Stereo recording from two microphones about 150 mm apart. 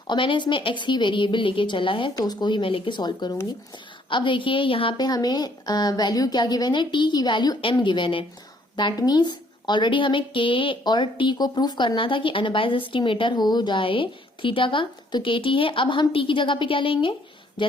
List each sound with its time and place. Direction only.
0.1 s a woman's voice: 30° left (ahead or behind)